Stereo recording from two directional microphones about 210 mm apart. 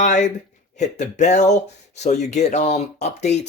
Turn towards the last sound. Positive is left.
turn(degrees=30)  # may be behind; listen again after turning